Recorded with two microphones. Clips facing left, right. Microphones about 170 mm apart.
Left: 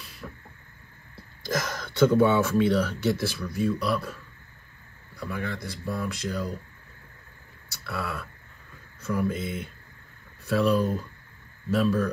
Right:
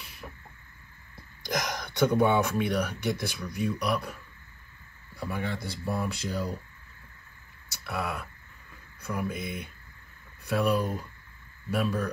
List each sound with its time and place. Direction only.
0.2 s a sound: 15° right (ahead or behind)
1.4 s speech: 15° right (ahead or behind)
5.2 s a man's voice: 25° right (ahead or behind)
7.7 s speech: 20° right (ahead or behind)